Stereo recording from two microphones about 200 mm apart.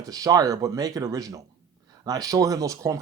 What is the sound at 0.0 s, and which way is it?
Speech, 20° right (ahead or behind).